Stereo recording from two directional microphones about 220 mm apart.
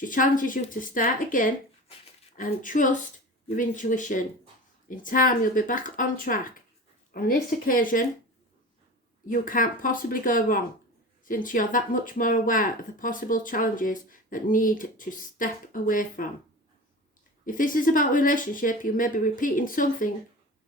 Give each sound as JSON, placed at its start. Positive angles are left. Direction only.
{"t": 0.0, "sound": "speech", "side_deg": 40}
{"t": 9.2, "sound": "speech", "side_deg": 40}
{"t": 17.4, "sound": "speech", "side_deg": 40}